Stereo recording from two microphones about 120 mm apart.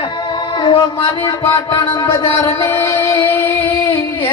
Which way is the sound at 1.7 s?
35° left (ahead or behind).